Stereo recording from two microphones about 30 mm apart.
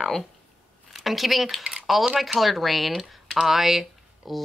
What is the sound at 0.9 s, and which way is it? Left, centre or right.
A woman's voice, centre.